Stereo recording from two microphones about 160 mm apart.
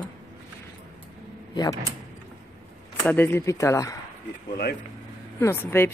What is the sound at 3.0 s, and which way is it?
Speech, 10° left (ahead or behind).